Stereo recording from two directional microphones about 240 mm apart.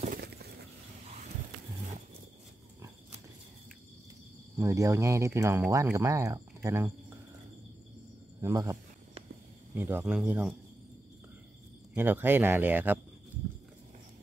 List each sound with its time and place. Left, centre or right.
0.0 s a sound: right
4.6 s speech: centre
8.4 s speech: centre
9.8 s speech: centre
11.9 s speech: centre